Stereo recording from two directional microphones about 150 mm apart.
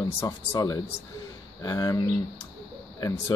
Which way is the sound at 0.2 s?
20° left (ahead or behind).